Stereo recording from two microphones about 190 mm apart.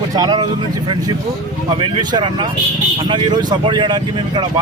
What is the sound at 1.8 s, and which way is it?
A man's voice, 25° right (ahead or behind).